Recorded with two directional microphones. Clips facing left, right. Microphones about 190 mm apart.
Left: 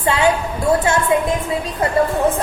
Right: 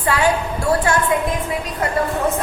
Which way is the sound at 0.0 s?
25° left (ahead or behind).